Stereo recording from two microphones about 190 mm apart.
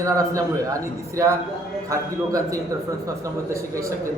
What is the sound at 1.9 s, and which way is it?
Speech, 15° right (ahead or behind).